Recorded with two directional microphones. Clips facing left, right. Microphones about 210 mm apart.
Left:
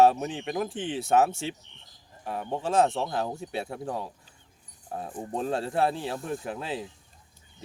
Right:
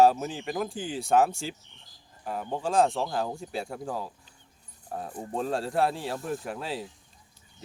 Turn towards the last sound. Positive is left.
turn(degrees=0)  # may be behind; listen again after turning